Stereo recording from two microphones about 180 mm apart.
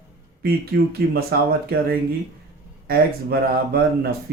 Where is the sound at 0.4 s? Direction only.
60° right (ahead or behind).